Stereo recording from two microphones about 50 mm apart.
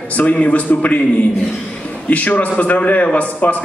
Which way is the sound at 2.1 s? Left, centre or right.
Left.